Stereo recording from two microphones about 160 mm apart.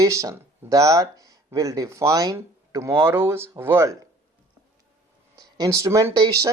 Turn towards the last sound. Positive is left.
turn(degrees=-25)  # may be behind; listen again after turning